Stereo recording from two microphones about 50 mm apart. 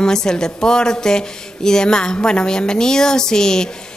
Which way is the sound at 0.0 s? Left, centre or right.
Centre.